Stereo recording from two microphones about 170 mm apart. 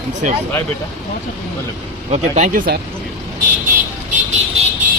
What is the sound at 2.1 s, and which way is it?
Speech, 50° right (ahead or behind).